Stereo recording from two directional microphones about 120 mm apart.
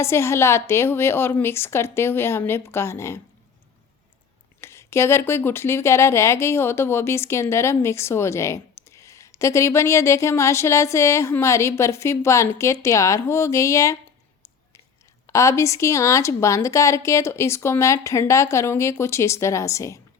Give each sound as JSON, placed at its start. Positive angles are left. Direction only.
{"t": 0.0, "sound": "speech", "side_deg": 20}
{"t": 4.6, "sound": "speech", "side_deg": 20}
{"t": 15.3, "sound": "speech", "side_deg": 25}